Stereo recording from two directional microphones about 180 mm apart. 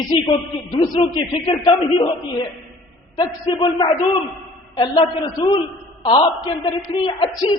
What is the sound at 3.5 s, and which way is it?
A man's voice, 25° left (ahead or behind).